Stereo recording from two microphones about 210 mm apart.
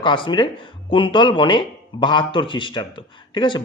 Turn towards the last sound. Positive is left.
turn(degrees=20)  # may be behind; listen again after turning